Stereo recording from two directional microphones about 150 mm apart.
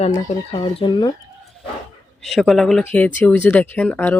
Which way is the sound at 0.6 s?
30° left (ahead or behind).